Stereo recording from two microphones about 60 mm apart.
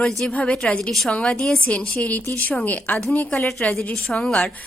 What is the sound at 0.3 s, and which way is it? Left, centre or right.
A woman's voice, left.